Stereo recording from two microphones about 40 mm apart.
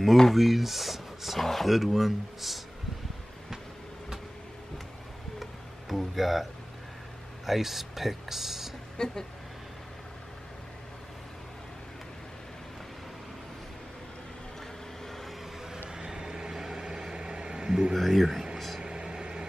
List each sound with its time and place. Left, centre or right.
0.3 s speech: centre
5.4 s music: centre
7.4 s speech: centre
8.9 s speech: centre
15.9 s vehicle: centre
17.9 s speech: centre
18.2 s speech: centre
18.8 s vehicle: right